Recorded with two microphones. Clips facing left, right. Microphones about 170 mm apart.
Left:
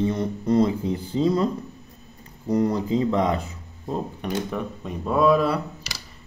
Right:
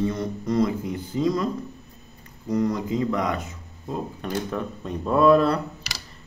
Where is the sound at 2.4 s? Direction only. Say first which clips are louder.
Left 2 dB; 30° left (ahead or behind).